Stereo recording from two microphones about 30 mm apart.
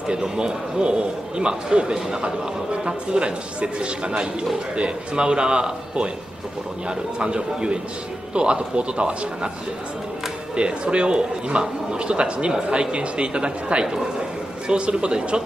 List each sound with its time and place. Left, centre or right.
0.1 s a man's voice: right
2.2 s a man's voice: right
10.5 s a man's voice: right